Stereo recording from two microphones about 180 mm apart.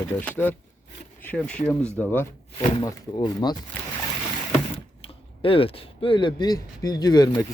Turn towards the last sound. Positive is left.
turn(degrees=20)  # may be behind; listen again after turning